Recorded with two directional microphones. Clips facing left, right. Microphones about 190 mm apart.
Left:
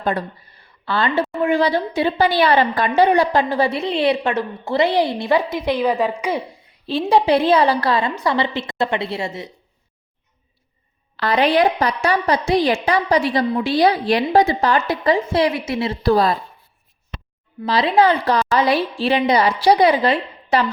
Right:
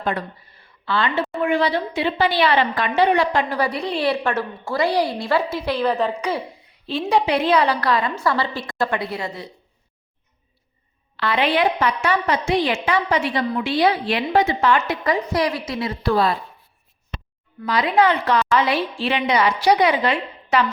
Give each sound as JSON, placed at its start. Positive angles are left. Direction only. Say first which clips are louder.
{"t": 0.0, "sound": "a woman's voice", "louder": "left 3 dB", "side_deg": 35}
{"t": 6.8, "sound": "a woman's voice", "louder": "left 4 dB", "side_deg": 35}
{"t": 11.2, "sound": "a woman's voice", "louder": "left 4 dB", "side_deg": 40}
{"t": 17.6, "sound": "a woman's voice", "louder": "left 2 dB", "side_deg": 30}